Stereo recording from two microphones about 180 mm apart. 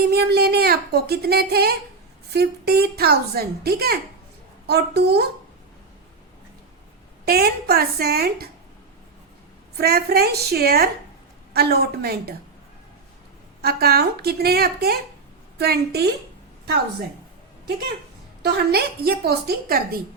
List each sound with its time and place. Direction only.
0.1 s speech: 60° right (ahead or behind)
7.3 s speech: 60° right (ahead or behind)
9.7 s speech: 60° right (ahead or behind)
13.6 s speech: 60° right (ahead or behind)
18.4 s speech: 60° right (ahead or behind)